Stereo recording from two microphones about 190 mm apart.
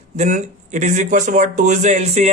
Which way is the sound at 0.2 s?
40° right (ahead or behind).